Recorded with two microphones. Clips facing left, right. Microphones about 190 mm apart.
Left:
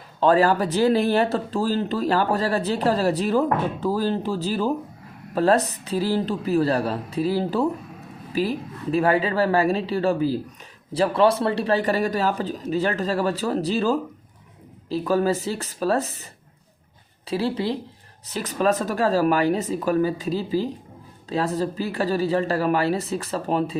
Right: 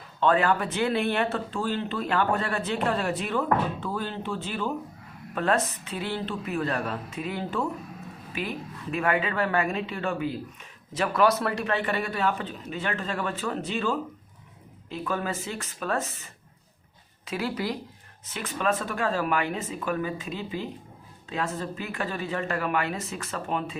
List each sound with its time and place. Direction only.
0.2 s speech: 35° left (ahead or behind)
17.2 s speech: 30° left (ahead or behind)